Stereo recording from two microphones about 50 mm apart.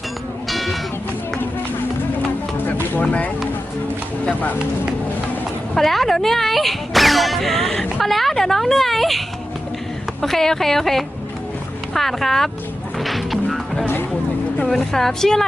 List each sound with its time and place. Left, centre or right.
0.4 s music: centre
3.0 s speech: left
5.7 s a woman's voice: centre
13.0 s music: centre
14.6 s a woman's voice: centre